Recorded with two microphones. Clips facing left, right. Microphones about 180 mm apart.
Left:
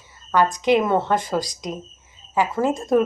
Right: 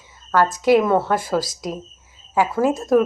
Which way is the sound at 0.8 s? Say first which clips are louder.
Right 2 dB; 5° right (ahead or behind).